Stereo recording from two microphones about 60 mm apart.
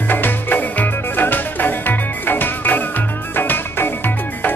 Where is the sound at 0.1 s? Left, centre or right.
Left.